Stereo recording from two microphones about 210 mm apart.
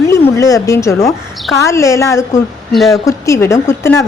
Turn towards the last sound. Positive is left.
turn(degrees=10)  # may be behind; listen again after turning